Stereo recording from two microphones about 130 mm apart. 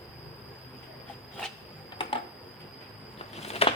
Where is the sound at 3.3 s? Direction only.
50° left (ahead or behind).